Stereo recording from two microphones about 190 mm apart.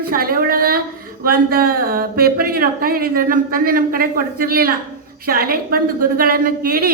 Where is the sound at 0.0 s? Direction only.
50° right (ahead or behind).